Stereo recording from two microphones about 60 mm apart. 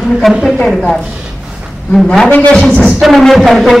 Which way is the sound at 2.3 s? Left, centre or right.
Left.